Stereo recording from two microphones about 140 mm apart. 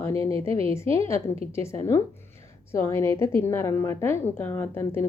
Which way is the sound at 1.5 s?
20° left (ahead or behind).